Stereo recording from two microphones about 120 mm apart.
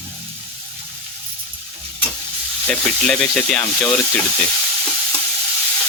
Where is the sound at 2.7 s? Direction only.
5° left (ahead or behind).